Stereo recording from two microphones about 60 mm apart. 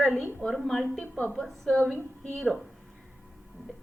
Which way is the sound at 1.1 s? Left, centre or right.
Left.